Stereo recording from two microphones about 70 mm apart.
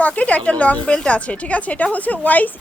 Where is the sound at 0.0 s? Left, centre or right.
Centre.